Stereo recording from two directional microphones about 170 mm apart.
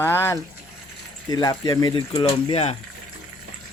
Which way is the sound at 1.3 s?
20° left (ahead or behind).